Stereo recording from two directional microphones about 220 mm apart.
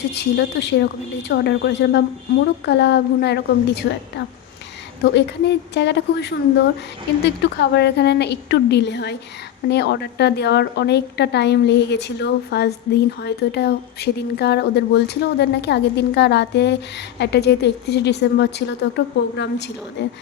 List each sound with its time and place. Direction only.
0.2 s a woman's voice: 50° left (ahead or behind)
5.1 s a woman's voice: 50° left (ahead or behind)